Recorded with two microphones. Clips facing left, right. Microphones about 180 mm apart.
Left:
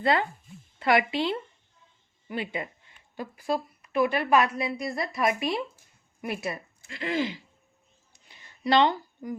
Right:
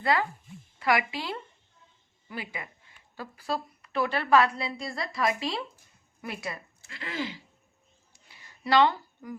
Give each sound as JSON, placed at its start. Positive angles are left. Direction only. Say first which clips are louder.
{"t": 0.0, "sound": "speech", "louder": "left 2 dB", "side_deg": 25}
{"t": 3.2, "sound": "a woman's voice", "louder": "left 4 dB", "side_deg": 15}
{"t": 8.1, "sound": "a sound", "louder": "left 1 dB", "side_deg": 20}